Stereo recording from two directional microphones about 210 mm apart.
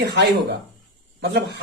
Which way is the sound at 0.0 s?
55° right (ahead or behind).